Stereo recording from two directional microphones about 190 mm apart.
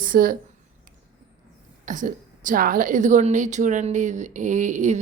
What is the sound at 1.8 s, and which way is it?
A woman's voice, 45° right (ahead or behind).